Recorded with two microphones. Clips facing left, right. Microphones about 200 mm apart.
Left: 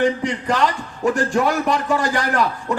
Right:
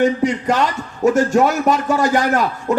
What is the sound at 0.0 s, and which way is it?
A man's voice, 45° right (ahead or behind).